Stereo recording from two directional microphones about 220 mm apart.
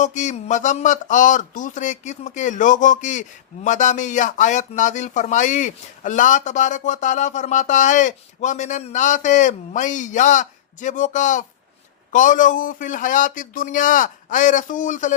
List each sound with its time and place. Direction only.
0.0 s speech: 35° left (ahead or behind)